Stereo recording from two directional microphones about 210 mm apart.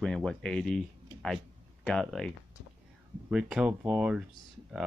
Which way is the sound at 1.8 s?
5° left (ahead or behind).